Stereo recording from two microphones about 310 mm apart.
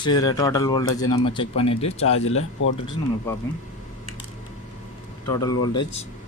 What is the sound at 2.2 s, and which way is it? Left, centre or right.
Speech, left.